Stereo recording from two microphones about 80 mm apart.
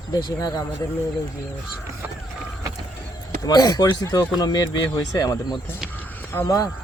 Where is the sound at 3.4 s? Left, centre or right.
Left.